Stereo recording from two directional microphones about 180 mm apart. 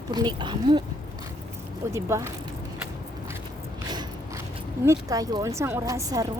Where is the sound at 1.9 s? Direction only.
15° right (ahead or behind).